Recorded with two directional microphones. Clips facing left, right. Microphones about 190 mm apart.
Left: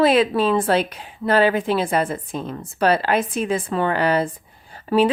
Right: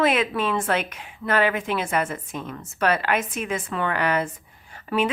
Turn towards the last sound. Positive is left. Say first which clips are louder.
# left 6 dB
turn(degrees=35)  # may be behind; listen again after turning